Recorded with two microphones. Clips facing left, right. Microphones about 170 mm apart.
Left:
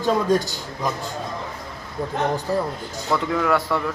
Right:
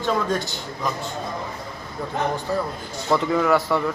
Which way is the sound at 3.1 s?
Centre (ahead or behind).